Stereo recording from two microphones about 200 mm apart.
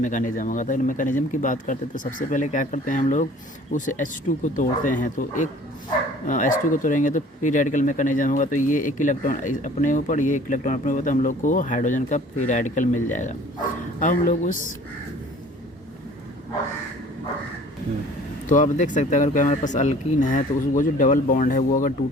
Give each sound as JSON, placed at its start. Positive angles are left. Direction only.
{"t": 0.0, "sound": "speech", "side_deg": 40}
{"t": 18.4, "sound": "speech", "side_deg": 40}